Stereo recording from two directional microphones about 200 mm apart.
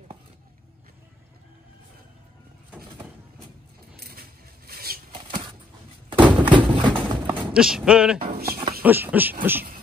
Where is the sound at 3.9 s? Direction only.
50° right (ahead or behind).